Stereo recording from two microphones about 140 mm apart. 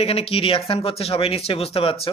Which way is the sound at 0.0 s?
45° left (ahead or behind).